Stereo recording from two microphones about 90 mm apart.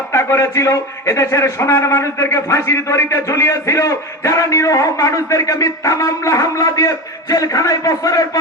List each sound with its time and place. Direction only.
0.1 s a man's voice: 35° left (ahead or behind)